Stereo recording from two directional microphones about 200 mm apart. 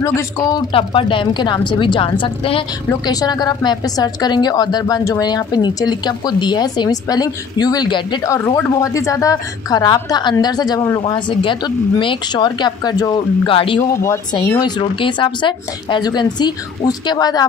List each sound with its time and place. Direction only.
0.0 s a woman's voice: 15° left (ahead or behind)
14.0 s a woman's voice: 15° left (ahead or behind)